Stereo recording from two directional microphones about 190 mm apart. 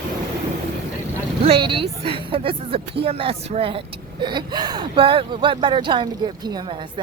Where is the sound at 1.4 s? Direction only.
30° right (ahead or behind).